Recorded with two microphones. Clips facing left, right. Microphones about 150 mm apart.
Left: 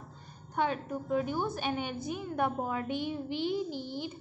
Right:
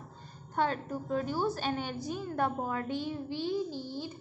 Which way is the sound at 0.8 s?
10° left (ahead or behind).